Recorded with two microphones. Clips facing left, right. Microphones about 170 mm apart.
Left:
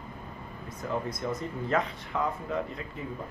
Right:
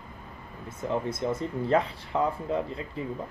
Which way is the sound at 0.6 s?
25° right (ahead or behind).